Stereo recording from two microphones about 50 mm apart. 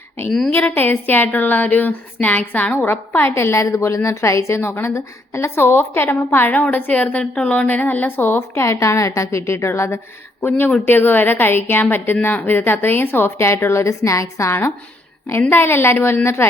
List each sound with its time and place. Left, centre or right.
0.3 s a sound: centre
0.8 s a woman's voice: left
5.7 s a woman's voice: left
6.5 s a woman's voice: left
8.5 s a woman's voice: left
10.8 s a woman's voice: left
13.4 s a woman's voice: left
15.3 s a woman's voice: left